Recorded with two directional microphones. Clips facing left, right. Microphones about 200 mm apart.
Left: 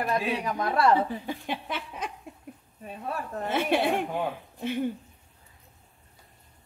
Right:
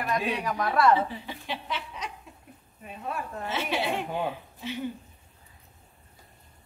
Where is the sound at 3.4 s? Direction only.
55° left (ahead or behind).